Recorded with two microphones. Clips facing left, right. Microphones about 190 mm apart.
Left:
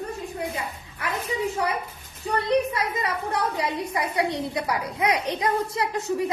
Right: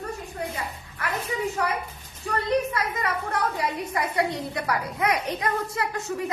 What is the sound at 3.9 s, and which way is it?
A woman's voice, 20° left (ahead or behind).